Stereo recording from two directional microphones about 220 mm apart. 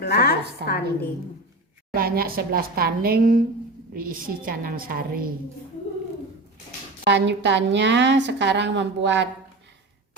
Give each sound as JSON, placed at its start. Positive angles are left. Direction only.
{"t": 0.0, "sound": "a woman's voice", "side_deg": 45}
{"t": 1.9, "sound": "a woman's voice", "side_deg": -45}
{"t": 7.0, "sound": "a woman's voice", "side_deg": -55}